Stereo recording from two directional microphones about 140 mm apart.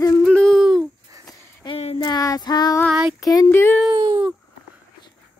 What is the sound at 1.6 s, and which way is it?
Female singing, 40° left (ahead or behind).